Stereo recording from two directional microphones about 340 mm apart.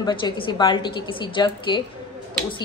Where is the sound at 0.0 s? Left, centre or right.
Centre.